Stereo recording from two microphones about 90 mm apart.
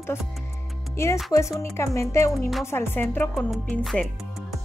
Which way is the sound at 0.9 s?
30° left (ahead or behind).